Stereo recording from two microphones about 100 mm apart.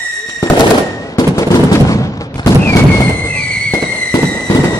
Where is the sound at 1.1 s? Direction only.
30° left (ahead or behind).